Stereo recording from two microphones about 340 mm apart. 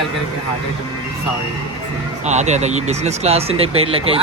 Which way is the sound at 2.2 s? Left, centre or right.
Centre.